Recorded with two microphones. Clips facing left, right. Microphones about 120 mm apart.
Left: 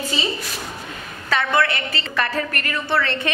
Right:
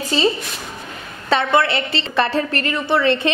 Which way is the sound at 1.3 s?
25° right (ahead or behind).